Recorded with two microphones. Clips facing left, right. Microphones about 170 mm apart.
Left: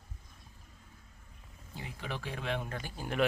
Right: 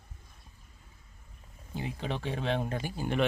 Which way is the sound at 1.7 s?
25° right (ahead or behind).